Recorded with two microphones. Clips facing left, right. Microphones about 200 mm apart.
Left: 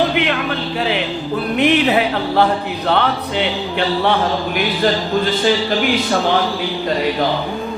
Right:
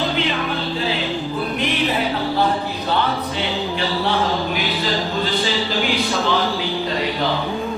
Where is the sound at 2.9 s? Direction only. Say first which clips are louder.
Left 4 dB; 65° left (ahead or behind).